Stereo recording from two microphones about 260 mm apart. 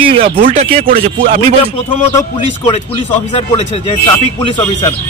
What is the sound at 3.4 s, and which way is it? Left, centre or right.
Speech, left.